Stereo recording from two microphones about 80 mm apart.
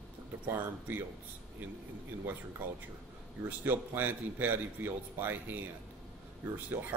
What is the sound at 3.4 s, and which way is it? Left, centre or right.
A man's voice, right.